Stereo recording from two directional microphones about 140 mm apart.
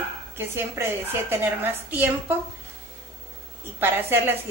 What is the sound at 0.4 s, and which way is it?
A woman's voice, 15° right (ahead or behind).